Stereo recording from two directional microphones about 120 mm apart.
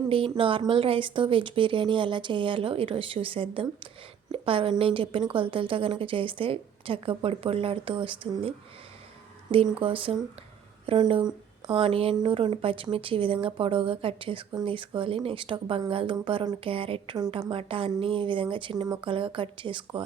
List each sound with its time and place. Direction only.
0.3 s a woman's voice: 45° right (ahead or behind)
11.7 s a woman's voice: 50° right (ahead or behind)